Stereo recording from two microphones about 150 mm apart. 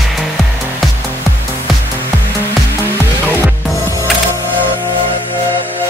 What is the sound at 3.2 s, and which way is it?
Music, 15° right (ahead or behind).